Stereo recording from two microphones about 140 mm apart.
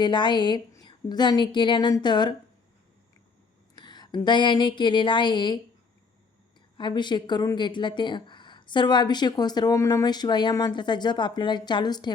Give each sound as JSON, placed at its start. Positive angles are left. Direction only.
{"t": 0.0, "sound": "speech", "side_deg": 35}
{"t": 3.8, "sound": "speech", "side_deg": 30}
{"t": 6.7, "sound": "speech", "side_deg": 35}